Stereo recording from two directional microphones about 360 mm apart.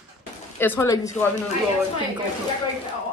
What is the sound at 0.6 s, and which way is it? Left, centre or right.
Speech, centre.